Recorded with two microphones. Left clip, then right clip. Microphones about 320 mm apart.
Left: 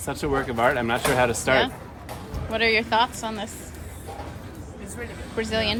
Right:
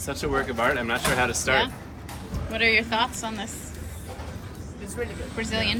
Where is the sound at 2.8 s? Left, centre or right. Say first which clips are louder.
Left 3 dB; centre.